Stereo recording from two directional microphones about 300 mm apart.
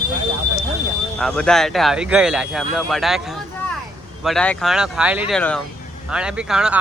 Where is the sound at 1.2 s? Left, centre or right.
Centre.